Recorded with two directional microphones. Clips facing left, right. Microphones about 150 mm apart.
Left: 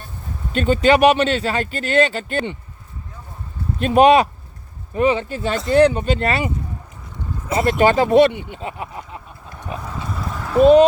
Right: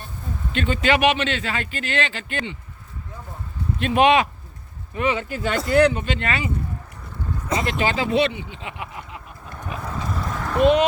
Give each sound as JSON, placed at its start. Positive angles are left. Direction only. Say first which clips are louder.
{"t": 0.5, "sound": "speech", "louder": "left 6 dB", "side_deg": 40}
{"t": 3.8, "sound": "speech", "louder": "left 5 dB", "side_deg": 40}
{"t": 7.6, "sound": "speech", "louder": "left 10 dB", "side_deg": 50}
{"t": 8.6, "sound": "a sound", "louder": "left 5 dB", "side_deg": 35}
{"t": 10.0, "sound": "clip-clop", "louder": "even", "side_deg": 5}